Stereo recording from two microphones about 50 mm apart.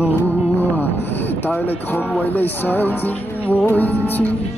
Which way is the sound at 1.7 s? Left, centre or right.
Left.